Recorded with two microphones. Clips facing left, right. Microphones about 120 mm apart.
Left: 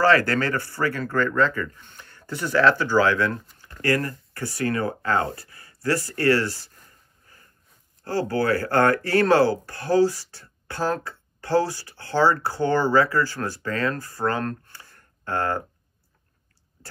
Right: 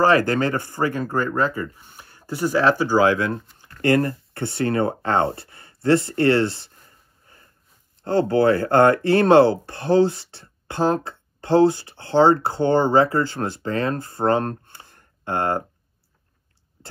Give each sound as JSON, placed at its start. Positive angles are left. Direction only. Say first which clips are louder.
{"t": 0.0, "sound": "speech", "louder": "right 2 dB", "side_deg": -20}
{"t": 3.8, "sound": "speech", "louder": "right 5 dB", "side_deg": -30}
{"t": 8.0, "sound": "speech", "louder": "right 6 dB", "side_deg": -25}